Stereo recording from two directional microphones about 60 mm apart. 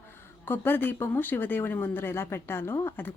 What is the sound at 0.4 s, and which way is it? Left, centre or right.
A woman's voice, left.